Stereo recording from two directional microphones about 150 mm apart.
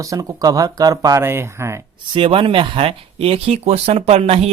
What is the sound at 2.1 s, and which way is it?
Speech, 35° right (ahead or behind).